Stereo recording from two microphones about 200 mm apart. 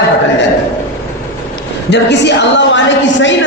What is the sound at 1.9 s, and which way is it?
A woman's voice, 60° left (ahead or behind).